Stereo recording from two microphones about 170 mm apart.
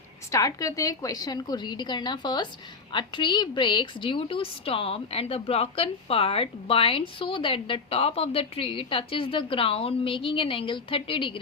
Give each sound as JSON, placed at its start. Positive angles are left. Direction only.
{"t": 0.3, "sound": "a woman's voice", "side_deg": 20}